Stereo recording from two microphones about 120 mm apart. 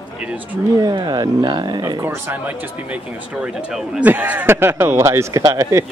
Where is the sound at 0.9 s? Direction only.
35° right (ahead or behind).